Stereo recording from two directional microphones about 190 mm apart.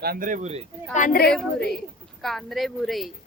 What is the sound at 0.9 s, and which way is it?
Speech, 40° left (ahead or behind).